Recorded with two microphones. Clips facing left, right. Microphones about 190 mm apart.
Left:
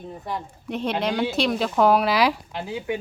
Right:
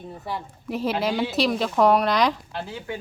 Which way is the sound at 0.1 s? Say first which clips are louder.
Left 1 dB; 5° right (ahead or behind).